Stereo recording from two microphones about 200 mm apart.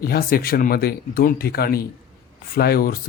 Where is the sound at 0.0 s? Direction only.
50° left (ahead or behind).